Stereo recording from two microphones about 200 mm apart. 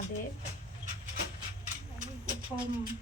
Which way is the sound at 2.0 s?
40° right (ahead or behind).